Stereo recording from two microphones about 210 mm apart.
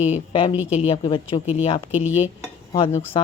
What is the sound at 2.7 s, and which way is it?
Speech, 25° left (ahead or behind).